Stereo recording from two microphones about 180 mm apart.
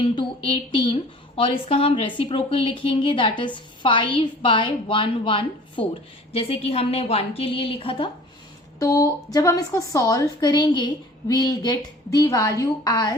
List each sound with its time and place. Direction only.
0.0 s a woman's voice: 30° left (ahead or behind)
8.8 s a woman's voice: 20° left (ahead or behind)